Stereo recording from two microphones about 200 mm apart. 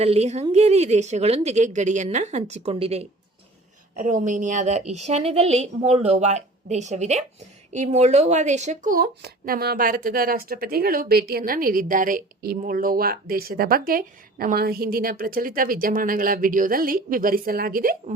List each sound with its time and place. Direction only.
0.0 s a woman's voice: 30° right (ahead or behind)
3.9 s a woman's voice: 40° right (ahead or behind)